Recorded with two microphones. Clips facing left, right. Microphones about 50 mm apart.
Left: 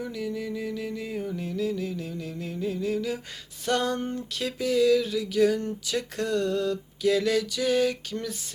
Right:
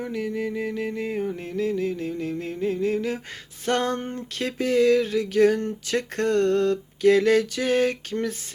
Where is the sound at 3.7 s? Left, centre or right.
Right.